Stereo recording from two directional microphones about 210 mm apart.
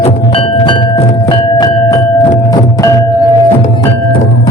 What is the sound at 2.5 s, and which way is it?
Music, 15° left (ahead or behind).